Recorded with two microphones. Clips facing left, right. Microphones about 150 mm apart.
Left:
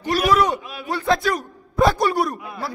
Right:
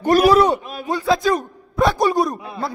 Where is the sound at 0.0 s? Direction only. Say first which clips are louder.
Right 7 dB; 50° right (ahead or behind).